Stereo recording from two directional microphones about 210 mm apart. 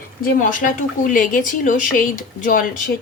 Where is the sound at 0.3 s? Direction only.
40° left (ahead or behind).